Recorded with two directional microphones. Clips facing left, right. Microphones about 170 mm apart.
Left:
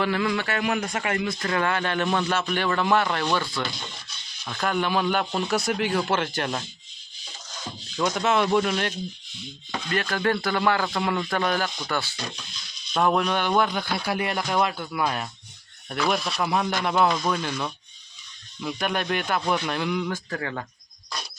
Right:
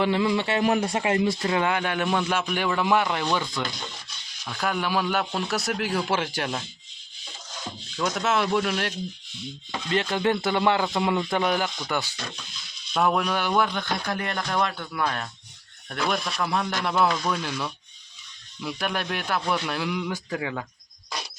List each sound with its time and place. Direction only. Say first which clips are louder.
0.0 s a man's voice: right 2 dB; 20° right (ahead or behind)
4.4 s speech: left 2 dB; 5° right (ahead or behind)
7.9 s speech: left 2 dB; centre (ahead or behind)
9.9 s a man's voice: right 1 dB; 20° right (ahead or behind)
12.9 s a man's voice: left 1 dB; 5° right (ahead or behind)